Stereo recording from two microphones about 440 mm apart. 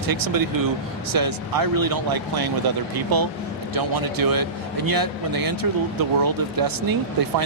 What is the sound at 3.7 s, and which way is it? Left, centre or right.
A man's voice, right.